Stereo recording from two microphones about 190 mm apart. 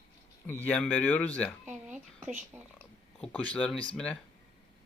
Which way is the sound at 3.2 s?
5° left (ahead or behind).